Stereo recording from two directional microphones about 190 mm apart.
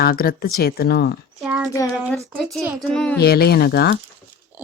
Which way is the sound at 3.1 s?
55° left (ahead or behind).